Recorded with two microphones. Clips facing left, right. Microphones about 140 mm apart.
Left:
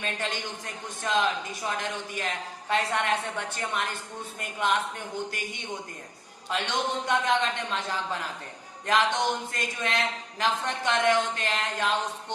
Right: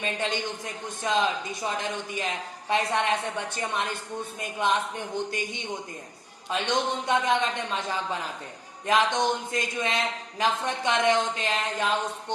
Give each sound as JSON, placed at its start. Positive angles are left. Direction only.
{"t": 0.0, "sound": "a man's voice", "side_deg": -15}
{"t": 6.5, "sound": "a man's voice", "side_deg": -15}